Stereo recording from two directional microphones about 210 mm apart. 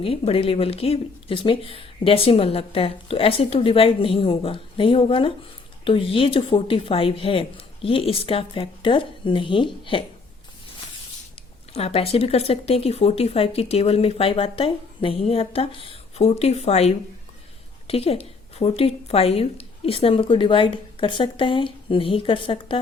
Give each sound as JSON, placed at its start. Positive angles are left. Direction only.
{"t": 0.0, "sound": "speech", "side_deg": 25}
{"t": 11.7, "sound": "speech", "side_deg": 30}